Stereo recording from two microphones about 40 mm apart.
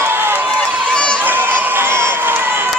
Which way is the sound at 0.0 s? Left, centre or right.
Right.